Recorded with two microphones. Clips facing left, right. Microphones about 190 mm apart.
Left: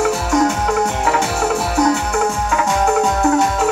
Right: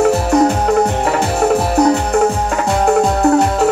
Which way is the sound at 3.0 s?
35° right (ahead or behind).